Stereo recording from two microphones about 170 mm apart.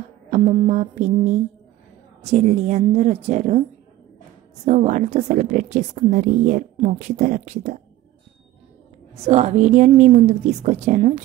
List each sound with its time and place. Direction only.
0.3 s a woman's voice: 40° right (ahead or behind)
4.6 s a woman's voice: 40° right (ahead or behind)
9.1 s a woman's voice: 40° right (ahead or behind)